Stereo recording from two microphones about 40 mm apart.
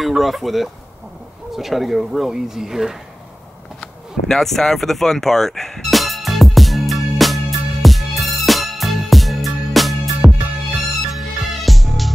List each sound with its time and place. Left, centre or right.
0.2 s speech: centre
3.8 s a sound: centre
4.5 s speech: centre
5.8 s music: centre